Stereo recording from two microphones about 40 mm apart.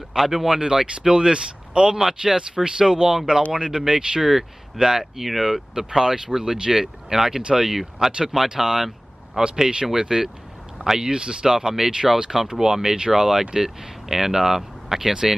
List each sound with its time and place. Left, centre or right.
0.1 s speech: centre; by 2.0 s right
2.0 s speech: centre
4.2 s speech: centre